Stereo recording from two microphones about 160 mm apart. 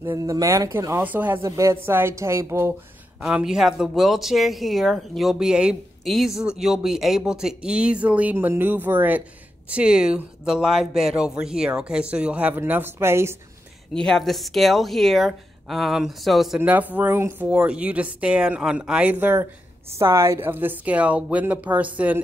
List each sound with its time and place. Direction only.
0.0 s speech: 20° right (ahead or behind)
3.2 s speech: 5° right (ahead or behind)
13.9 s speech: 5° left (ahead or behind)